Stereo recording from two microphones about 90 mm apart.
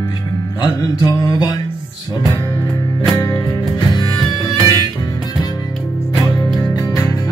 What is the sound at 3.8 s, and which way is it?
Music, 50° left (ahead or behind).